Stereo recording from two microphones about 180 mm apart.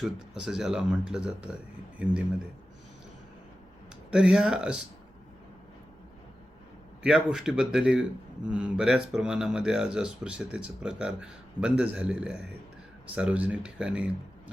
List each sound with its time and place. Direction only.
0.0 s speech: 5° right (ahead or behind)
4.1 s speech: 5° right (ahead or behind)
7.0 s speech: 5° right (ahead or behind)